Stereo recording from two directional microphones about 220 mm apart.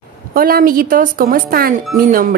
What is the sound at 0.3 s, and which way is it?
Speech, 40° right (ahead or behind).